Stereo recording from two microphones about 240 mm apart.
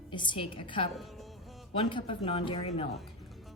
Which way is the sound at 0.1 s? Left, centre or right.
Centre.